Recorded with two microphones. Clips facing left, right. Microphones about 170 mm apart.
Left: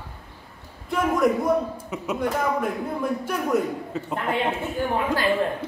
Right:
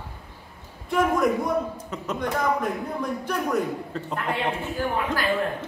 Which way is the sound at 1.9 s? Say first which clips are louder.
Left 2 dB; 5° left (ahead or behind).